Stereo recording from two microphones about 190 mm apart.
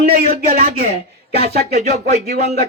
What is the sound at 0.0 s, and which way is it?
A man's voice, 45° right (ahead or behind).